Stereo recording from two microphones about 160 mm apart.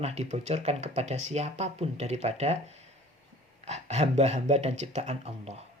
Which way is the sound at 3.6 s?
45° right (ahead or behind).